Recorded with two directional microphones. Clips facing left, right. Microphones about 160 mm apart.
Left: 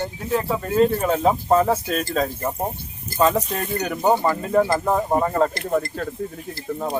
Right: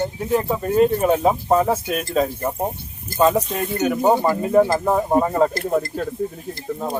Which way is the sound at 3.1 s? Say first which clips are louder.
Right 2 dB; 10° right (ahead or behind).